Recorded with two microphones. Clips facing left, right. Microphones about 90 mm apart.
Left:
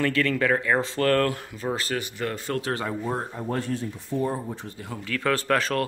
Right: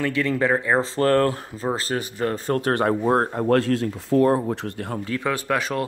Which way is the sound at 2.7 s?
55° right (ahead or behind).